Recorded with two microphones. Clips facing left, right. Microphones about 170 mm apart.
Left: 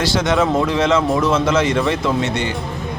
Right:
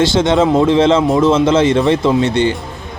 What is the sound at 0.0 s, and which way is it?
Speech, 25° right (ahead or behind).